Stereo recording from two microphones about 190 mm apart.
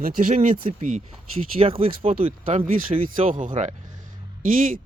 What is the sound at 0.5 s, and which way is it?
Speech, 30° right (ahead or behind).